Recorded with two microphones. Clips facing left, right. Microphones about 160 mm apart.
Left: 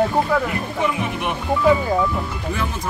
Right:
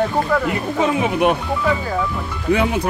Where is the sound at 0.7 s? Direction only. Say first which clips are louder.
Right 6 dB; 90° right.